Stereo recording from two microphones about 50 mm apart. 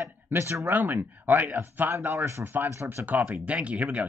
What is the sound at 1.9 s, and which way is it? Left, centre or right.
Speech, right.